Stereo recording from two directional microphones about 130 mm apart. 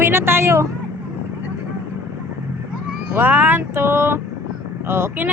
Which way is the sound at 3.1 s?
15° right (ahead or behind).